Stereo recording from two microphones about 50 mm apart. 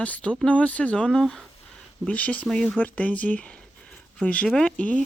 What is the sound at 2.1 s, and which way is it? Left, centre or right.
Speech, left.